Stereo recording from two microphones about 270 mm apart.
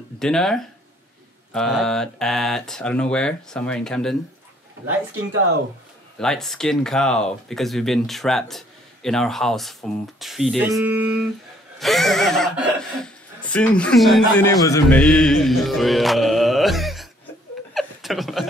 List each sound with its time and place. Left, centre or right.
0.2 s speech: centre
6.1 s speech: centre
14.5 s music: centre
17.7 s chuckle: centre